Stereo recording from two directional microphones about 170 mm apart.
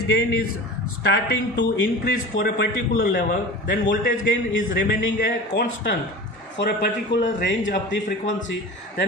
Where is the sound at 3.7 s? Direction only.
75° left (ahead or behind).